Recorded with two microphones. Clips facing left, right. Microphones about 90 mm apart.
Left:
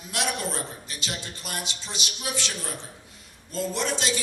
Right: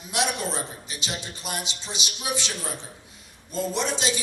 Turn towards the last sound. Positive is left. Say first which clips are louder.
# right 1 dB
turn(degrees=-20)  # may be behind; listen again after turning